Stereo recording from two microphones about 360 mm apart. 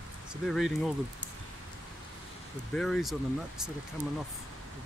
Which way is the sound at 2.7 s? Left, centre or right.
Centre.